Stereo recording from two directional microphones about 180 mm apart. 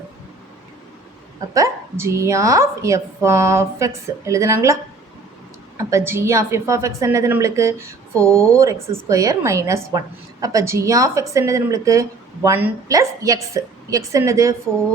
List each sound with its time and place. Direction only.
1.5 s a woman's voice: 15° right (ahead or behind)